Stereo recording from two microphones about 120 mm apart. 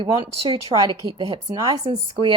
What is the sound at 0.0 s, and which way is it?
A woman's voice, 45° right (ahead or behind).